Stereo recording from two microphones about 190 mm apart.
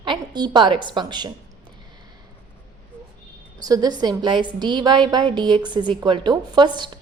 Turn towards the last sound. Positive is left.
turn(degrees=-25)  # may be behind; listen again after turning